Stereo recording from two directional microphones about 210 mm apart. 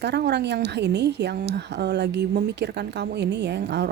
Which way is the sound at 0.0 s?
55° right (ahead or behind).